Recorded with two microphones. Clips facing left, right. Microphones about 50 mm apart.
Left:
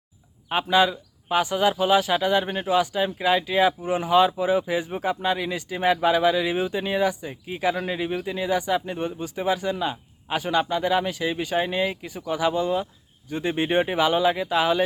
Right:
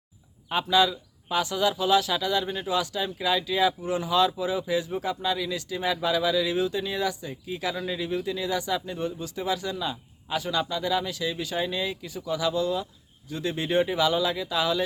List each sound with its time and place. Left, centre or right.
0.5 s speech: left